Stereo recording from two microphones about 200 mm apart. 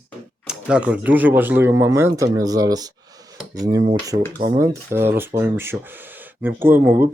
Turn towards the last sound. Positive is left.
turn(degrees=-10)  # may be behind; listen again after turning